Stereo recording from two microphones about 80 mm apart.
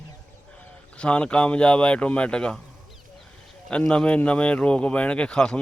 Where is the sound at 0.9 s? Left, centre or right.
Centre.